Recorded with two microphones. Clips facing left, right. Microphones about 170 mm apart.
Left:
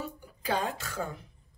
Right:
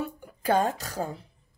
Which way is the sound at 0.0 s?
55° right (ahead or behind).